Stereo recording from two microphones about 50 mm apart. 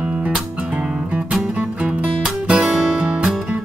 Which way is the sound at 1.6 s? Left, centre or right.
Right.